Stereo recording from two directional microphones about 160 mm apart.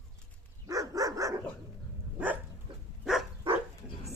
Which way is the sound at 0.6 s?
20° right (ahead or behind).